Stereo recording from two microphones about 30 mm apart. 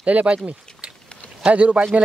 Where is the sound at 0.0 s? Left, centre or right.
Right.